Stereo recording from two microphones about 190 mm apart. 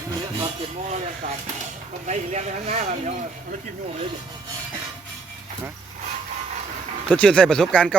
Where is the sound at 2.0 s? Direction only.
40° right (ahead or behind).